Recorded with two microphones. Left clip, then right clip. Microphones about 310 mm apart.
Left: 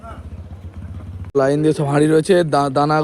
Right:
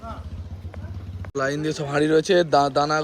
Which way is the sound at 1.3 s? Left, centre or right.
Centre.